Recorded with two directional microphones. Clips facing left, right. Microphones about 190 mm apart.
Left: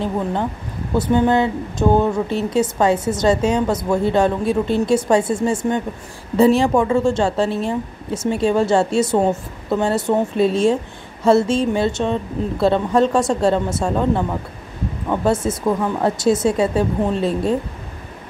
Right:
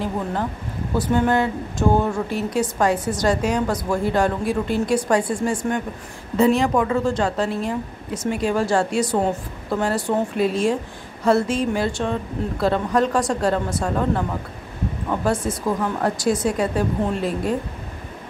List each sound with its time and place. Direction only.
0.9 s a woman's voice: 20° left (ahead or behind)